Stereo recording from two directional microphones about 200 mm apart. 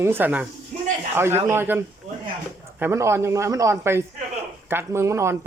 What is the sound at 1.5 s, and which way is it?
Speech, 10° right (ahead or behind).